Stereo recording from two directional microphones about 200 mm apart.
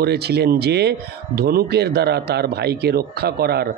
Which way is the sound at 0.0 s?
55° right (ahead or behind).